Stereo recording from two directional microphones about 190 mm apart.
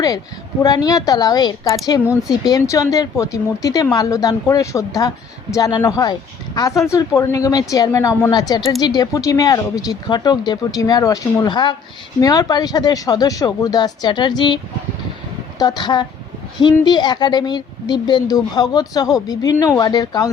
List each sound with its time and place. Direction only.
0.6 s speech: 20° left (ahead or behind)